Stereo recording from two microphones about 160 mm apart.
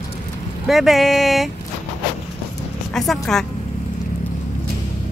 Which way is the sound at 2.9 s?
Centre (ahead or behind).